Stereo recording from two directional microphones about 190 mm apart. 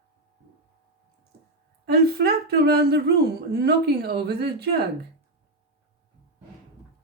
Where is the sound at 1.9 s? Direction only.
55° right (ahead or behind).